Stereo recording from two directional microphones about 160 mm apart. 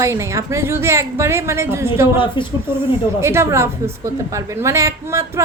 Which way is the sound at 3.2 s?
15° right (ahead or behind).